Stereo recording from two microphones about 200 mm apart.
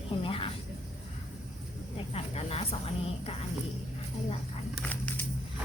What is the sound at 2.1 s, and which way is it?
Speech, 30° left (ahead or behind).